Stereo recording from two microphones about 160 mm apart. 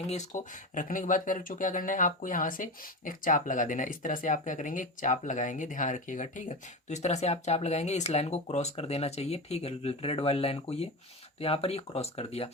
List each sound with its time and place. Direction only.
0.1 s speech: 50° left (ahead or behind)